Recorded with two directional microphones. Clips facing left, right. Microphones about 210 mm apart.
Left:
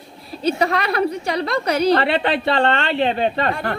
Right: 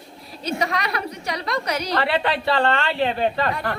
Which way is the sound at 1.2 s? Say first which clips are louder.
Left 5 dB; 30° left (ahead or behind).